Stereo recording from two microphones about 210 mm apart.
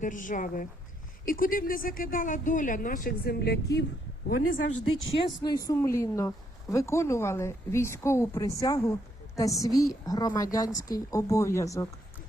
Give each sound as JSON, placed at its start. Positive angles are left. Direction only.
{"t": 0.0, "sound": "a woman's voice", "side_deg": 40}
{"t": 4.7, "sound": "speech", "side_deg": 70}
{"t": 5.4, "sound": "a woman's voice", "side_deg": 20}